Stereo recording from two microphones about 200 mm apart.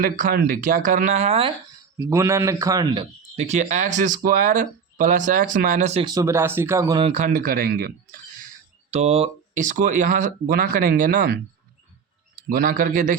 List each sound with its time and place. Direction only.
0.0 s speech: 45° right (ahead or behind)
2.0 s speech: 15° right (ahead or behind); by 6.1 s 35° right (ahead or behind)
6.1 s speech: 15° right (ahead or behind)
7.0 s speech: 35° right (ahead or behind)
8.9 s speech: 30° right (ahead or behind)
12.4 s speech: 45° right (ahead or behind)